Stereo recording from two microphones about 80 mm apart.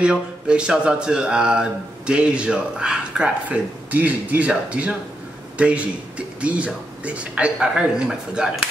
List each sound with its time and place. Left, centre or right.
0.0 s speech: centre